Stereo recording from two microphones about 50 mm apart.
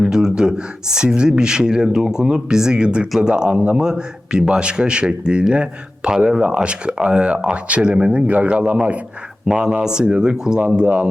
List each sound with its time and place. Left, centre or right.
0.0 s speech: centre
3.5 s speech: right
3.8 s speech: centre
9.5 s speech: centre
10.8 s speech: right